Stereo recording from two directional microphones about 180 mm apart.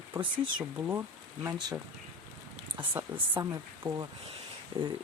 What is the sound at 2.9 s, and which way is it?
Speech, 10° right (ahead or behind).